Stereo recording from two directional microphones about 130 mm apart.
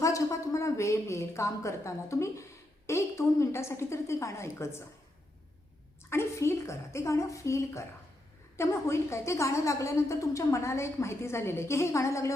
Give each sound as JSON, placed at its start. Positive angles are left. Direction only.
{"t": 0.0, "sound": "a woman's voice", "side_deg": 25}
{"t": 6.1, "sound": "a woman's voice", "side_deg": 20}